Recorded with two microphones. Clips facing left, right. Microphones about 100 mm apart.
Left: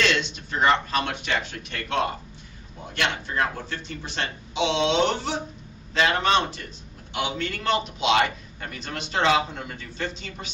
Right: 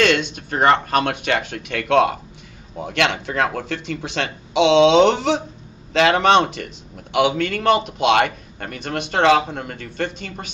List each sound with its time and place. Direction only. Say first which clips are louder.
0.0 s speech: right 7 dB; 55° right (ahead or behind)